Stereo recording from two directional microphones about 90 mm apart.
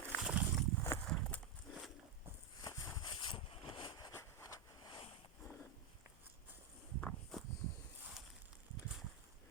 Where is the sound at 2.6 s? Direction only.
55° left (ahead or behind).